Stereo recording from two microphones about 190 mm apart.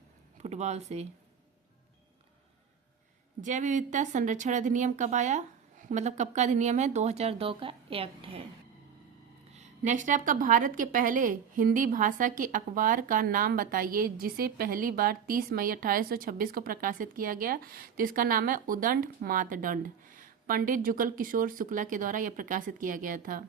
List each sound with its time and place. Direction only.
0.3 s speech: 35° right (ahead or behind)
3.4 s speech: 40° right (ahead or behind)
9.6 s a woman's voice: 40° right (ahead or behind)